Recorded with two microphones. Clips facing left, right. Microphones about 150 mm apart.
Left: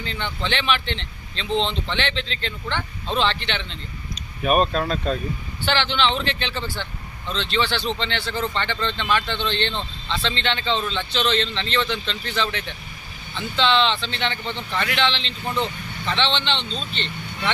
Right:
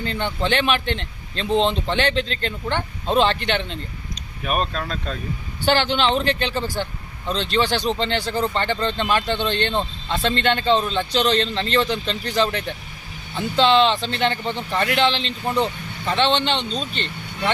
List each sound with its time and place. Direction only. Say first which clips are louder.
0.0 s speech: right 5 dB; 45° right (ahead or behind)
4.4 s speech: left 5 dB; 10° left (ahead or behind)
5.6 s speech: right 3 dB; 45° right (ahead or behind)